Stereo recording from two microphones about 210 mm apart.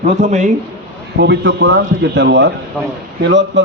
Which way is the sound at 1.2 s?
55° right (ahead or behind).